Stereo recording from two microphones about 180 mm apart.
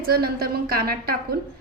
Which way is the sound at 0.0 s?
55° right (ahead or behind).